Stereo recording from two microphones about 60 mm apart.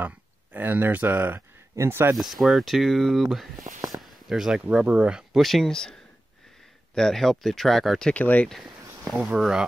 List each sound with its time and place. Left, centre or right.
0.0 s speech: right
2.1 s speech: centre
3.9 s a sound: centre
4.6 s speech: centre
5.3 s speech: centre
7.0 s speech: centre
8.1 s speech: left
9.1 s speech: centre